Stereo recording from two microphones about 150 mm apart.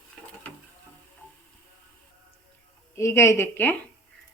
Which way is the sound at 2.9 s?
20° left (ahead or behind).